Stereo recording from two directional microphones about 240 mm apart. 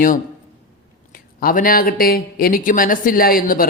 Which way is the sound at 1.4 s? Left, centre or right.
Left.